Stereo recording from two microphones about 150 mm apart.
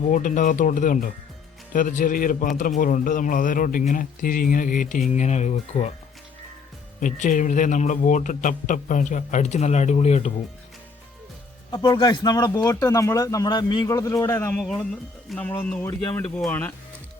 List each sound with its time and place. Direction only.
0.1 s speech: 60° left (ahead or behind)
7.0 s speech: 60° left (ahead or behind)
11.7 s speech: 30° left (ahead or behind)
14.6 s a man's voice: 5° left (ahead or behind)